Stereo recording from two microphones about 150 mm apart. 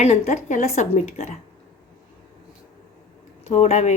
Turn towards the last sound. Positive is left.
turn(degrees=45)  # may be behind; listen again after turning